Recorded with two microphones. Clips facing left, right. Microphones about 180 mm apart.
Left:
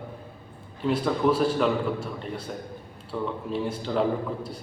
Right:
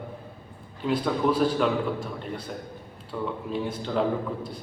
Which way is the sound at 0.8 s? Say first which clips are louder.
Left 1 dB; 5° left (ahead or behind).